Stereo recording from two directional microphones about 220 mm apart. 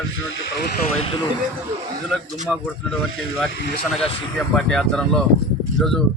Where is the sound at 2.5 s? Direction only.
Centre (ahead or behind).